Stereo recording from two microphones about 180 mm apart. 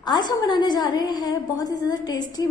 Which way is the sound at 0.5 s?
25° left (ahead or behind).